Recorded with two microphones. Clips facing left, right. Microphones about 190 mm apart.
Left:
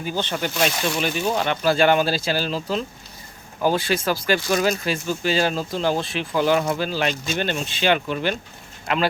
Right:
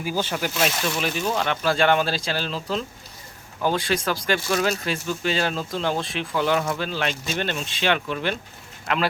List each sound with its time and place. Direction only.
0.0 s speech: 5° right (ahead or behind)
1.2 s speech: 10° left (ahead or behind)